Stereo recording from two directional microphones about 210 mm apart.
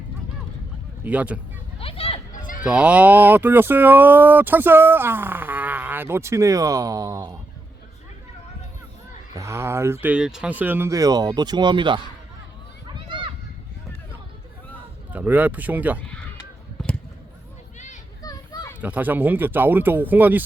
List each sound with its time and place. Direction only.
1.0 s speech: 5° right (ahead or behind)
1.8 s speech: 25° left (ahead or behind)
2.6 s speech: 5° right (ahead or behind)
9.3 s speech: 15° right (ahead or behind)
12.9 s run: 25° right (ahead or behind)
15.1 s speech: 5° right (ahead or behind)
16.8 s a sound: 5° left (ahead or behind)
18.2 s children playing: 20° left (ahead or behind)
18.8 s speech: 5° right (ahead or behind)